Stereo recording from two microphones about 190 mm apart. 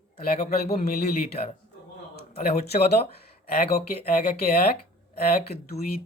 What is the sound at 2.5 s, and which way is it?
Speech, 35° left (ahead or behind).